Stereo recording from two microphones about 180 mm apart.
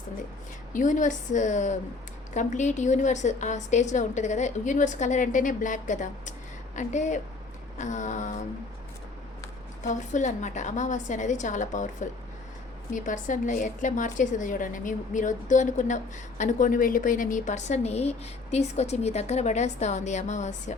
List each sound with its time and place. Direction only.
0.7 s a woman's voice: 45° left (ahead or behind)
9.8 s a woman's voice: 45° left (ahead or behind)